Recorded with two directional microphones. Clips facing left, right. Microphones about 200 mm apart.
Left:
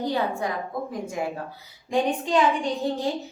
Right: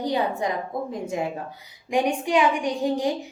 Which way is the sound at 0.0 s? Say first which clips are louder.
Right 1 dB; 15° right (ahead or behind).